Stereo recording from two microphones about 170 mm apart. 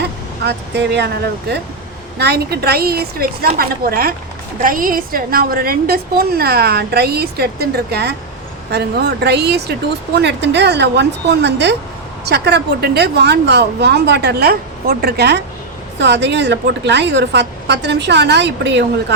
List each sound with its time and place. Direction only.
0.4 s a woman's voice: 85° right
10.2 s a woman's voice: 90° right
12.2 s a woman's voice: 75° right (ahead or behind)
16.0 s a woman's voice: 90° right